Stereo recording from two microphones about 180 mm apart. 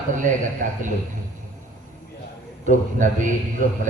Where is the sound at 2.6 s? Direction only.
45° right (ahead or behind).